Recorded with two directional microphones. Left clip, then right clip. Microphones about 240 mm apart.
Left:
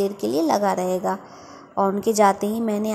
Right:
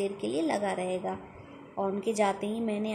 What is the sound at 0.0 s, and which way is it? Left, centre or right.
A woman's voice, left.